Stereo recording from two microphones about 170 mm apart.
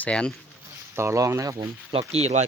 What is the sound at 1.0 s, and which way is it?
Speech, 15° right (ahead or behind).